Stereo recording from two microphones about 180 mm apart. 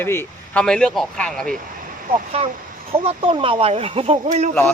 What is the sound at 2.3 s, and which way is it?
Speech, 35° right (ahead or behind).